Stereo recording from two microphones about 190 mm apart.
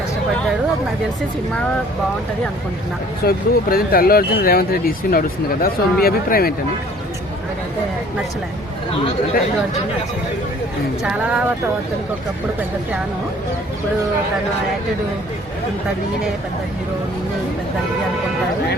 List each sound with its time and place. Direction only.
3.2 s speech: 50° left (ahead or behind)
11.0 s speech: 5° right (ahead or behind)